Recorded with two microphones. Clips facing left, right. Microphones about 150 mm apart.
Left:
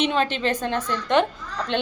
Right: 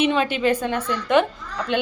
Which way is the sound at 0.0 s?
10° right (ahead or behind).